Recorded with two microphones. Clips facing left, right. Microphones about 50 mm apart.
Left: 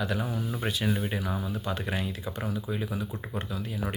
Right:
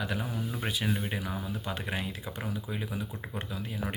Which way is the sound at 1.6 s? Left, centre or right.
Centre.